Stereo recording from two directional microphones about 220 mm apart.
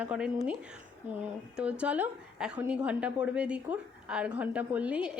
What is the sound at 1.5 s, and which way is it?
A woman's voice, 5° right (ahead or behind).